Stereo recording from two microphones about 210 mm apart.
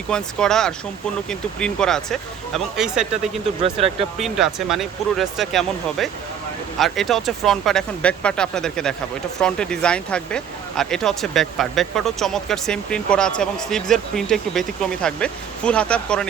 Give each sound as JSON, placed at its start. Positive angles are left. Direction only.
{"t": 0.1, "sound": "speech", "side_deg": 5}
{"t": 3.6, "sound": "speech", "side_deg": -25}
{"t": 4.2, "sound": "speech", "side_deg": 0}